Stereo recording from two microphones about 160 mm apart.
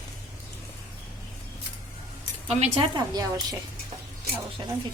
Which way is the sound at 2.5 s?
40° right (ahead or behind).